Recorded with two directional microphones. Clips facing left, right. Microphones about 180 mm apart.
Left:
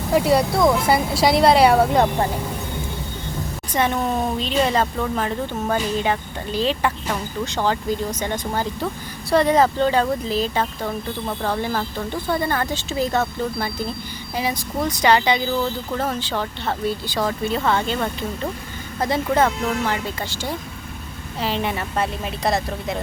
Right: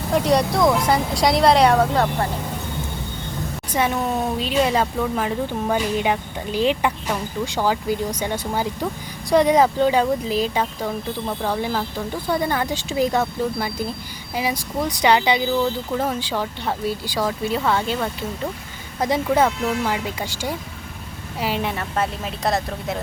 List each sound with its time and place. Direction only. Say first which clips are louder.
0.1 s speech: left 1 dB; 5° left (ahead or behind)
3.7 s speech: left 1 dB; 5° right (ahead or behind)
21.7 s speech: even; centre (ahead or behind)